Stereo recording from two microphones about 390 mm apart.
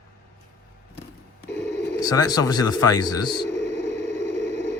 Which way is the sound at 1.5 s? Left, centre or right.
Centre.